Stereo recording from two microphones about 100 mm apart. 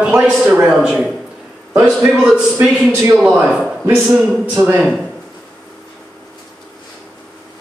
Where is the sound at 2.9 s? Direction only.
25° right (ahead or behind).